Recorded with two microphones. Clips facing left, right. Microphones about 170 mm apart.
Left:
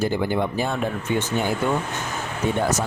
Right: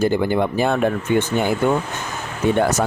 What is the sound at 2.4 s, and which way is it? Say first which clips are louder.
Speech: right 5 dB; 65° right (ahead or behind).